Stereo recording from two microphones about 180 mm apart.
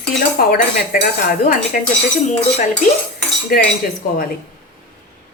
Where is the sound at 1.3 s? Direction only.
50° left (ahead or behind).